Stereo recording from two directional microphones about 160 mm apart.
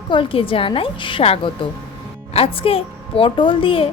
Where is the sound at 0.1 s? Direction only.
35° left (ahead or behind).